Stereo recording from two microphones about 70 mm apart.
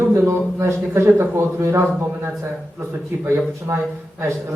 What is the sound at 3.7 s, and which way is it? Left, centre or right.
Speech, right.